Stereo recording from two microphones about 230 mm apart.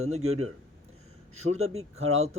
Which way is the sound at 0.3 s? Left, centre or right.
Right.